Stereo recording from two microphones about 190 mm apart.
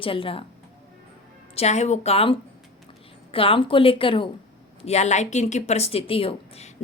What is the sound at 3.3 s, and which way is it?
A woman's voice, 30° left (ahead or behind).